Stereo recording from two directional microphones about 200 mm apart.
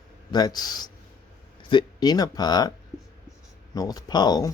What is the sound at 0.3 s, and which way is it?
Speech, 20° left (ahead or behind).